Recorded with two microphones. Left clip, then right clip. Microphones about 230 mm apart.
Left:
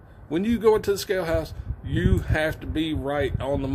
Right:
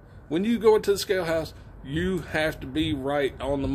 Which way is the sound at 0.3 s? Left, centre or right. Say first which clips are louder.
Even; centre.